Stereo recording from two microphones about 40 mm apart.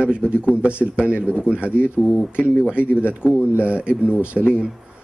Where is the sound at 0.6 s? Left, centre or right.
Right.